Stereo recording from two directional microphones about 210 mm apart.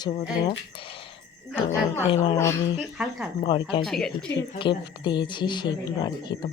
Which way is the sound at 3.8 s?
Centre (ahead or behind).